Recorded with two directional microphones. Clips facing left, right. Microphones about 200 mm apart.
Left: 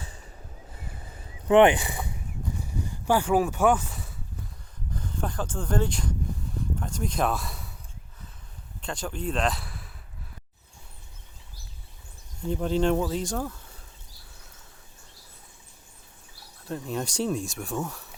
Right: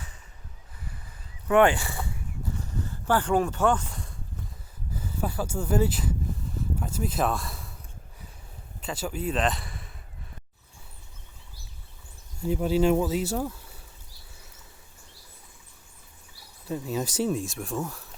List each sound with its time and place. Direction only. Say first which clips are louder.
1.5 s speech: left 3 dB; 20° left (ahead or behind)
2.6 s a sound: even; 10° left (ahead or behind)
4.9 s a sound: right 1 dB; 5° right (ahead or behind)
8.8 s speech: right 1 dB; 5° right (ahead or behind)
12.4 s speech: right 2 dB; 10° right (ahead or behind)
16.6 s speech: right 1 dB; centre (ahead or behind)